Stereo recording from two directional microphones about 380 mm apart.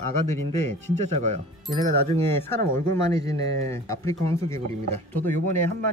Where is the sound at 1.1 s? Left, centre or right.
Centre.